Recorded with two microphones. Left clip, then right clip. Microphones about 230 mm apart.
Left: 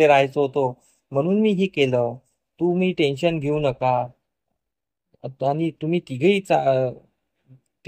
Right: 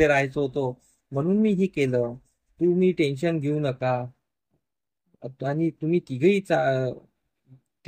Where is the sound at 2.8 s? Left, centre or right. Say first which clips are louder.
Left 2 dB; centre.